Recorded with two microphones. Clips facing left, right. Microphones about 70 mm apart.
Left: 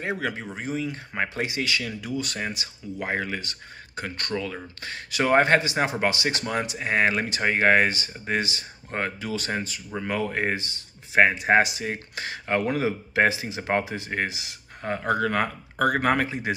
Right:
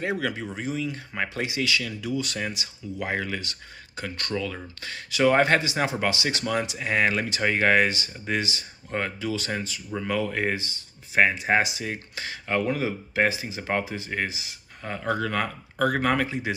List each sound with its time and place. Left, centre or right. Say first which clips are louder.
0.0 s a man's voice: right 1 dB; left
1.5 s speech: right 1 dB; left
10.6 s speech: even; left
13.3 s speech: left 2 dB; left
13.6 s speech: left 2 dB; left
13.8 s speech: left 1 dB; left
14.8 s speech: left 3 dB; left